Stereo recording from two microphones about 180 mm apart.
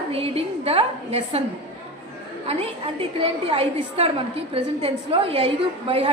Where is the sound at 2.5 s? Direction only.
35° right (ahead or behind).